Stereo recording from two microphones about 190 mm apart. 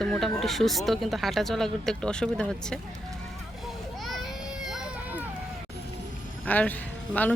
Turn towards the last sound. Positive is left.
turn(degrees=10)  # may be behind; listen again after turning